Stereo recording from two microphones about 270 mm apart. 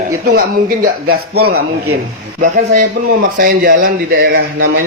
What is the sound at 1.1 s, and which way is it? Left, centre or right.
Speech, right.